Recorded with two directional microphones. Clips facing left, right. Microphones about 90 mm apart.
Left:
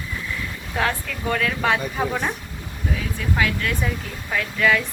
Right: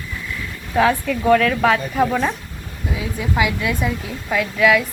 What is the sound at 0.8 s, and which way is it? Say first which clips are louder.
A woman's voice: right 8 dB; centre (ahead or behind).